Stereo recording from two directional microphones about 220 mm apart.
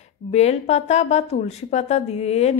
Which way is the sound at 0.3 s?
30° left (ahead or behind).